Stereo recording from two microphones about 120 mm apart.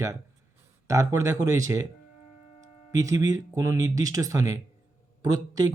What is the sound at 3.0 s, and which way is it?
A man's voice, 30° right (ahead or behind).